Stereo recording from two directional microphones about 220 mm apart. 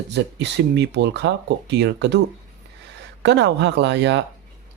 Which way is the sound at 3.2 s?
50° right (ahead or behind).